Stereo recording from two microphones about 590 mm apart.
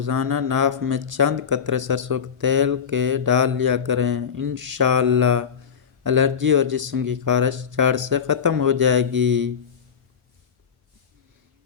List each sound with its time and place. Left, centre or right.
0.0 s speech: right
9.1 s speech: centre